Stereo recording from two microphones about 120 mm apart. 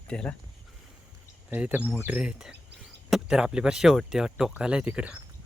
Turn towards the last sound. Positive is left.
turn(degrees=-10)  # may be behind; listen again after turning